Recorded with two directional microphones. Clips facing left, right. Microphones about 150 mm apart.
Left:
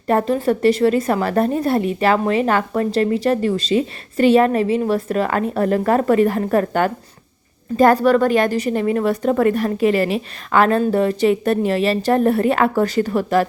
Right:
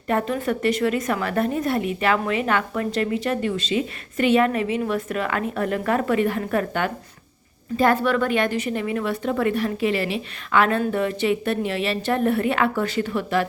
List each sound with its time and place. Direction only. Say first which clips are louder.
0.1 s a woman's voice: left 6 dB; 35° left (ahead or behind)